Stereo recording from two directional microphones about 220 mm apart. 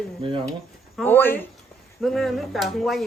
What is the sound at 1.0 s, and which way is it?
Speech, 10° left (ahead or behind).